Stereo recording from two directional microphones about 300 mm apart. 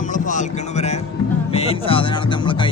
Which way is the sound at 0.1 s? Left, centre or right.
Left.